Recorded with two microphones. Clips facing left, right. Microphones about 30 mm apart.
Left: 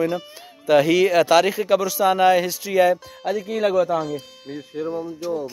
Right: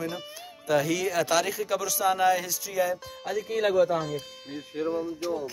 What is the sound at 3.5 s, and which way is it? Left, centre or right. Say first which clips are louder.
Speech: left 4 dB; left.